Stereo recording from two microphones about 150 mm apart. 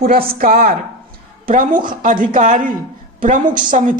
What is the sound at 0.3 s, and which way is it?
A woman's voice, 70° right (ahead or behind).